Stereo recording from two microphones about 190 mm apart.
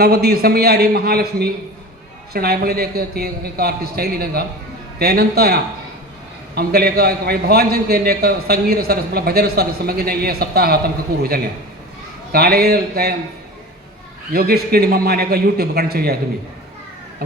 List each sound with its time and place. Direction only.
0.0 s a man's voice: 55° right (ahead or behind)
14.3 s a man's voice: 55° right (ahead or behind)